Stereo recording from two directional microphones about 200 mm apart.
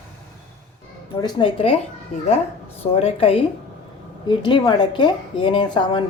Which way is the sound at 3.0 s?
30° left (ahead or behind).